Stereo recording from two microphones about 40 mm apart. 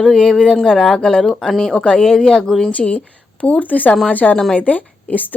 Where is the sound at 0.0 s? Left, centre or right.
Centre.